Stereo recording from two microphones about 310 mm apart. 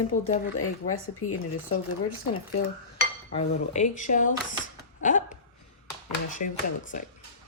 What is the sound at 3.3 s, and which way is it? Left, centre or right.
Speech, left.